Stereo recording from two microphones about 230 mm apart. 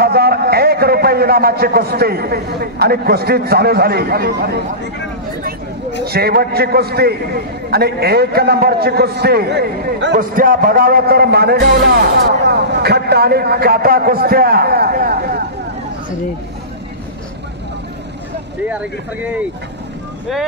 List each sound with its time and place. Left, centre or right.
0.0 s a man's voice: right
6.0 s a man's voice: right
18.7 s speech: centre